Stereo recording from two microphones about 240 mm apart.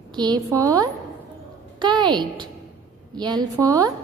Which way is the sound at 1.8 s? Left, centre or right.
Centre.